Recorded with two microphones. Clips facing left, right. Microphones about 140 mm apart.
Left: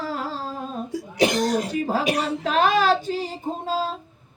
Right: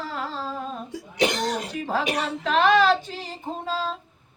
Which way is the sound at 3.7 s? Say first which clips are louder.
Left 3 dB; 40° left (ahead or behind).